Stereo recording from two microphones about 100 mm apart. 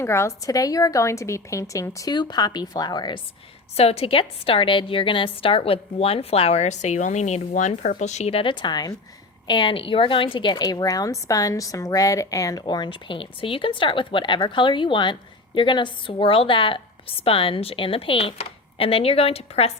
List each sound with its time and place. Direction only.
0.0 s speech: 25° left (ahead or behind)
2.1 s speech: 45° left (ahead or behind)
3.8 s a woman's voice: 85° left
8.2 s speech: 75° left (ahead or behind); by 9.0 s 40° left (ahead or behind)
9.5 s speech: 55° left (ahead or behind); by 12.6 s 35° left (ahead or behind)
12.6 s a woman's voice: 50° left (ahead or behind); by 19.7 s 90° left